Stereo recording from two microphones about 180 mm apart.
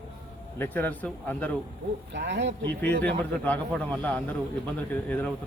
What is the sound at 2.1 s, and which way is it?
Speech, 75° right (ahead or behind).